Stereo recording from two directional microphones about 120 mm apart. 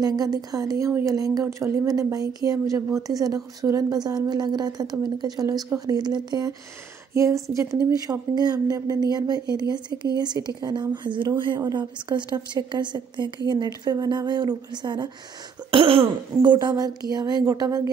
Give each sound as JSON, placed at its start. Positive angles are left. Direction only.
{"t": 0.0, "sound": "a woman's voice", "side_deg": -35}
{"t": 15.7, "sound": "cough", "side_deg": -50}
{"t": 16.4, "sound": "speech", "side_deg": -35}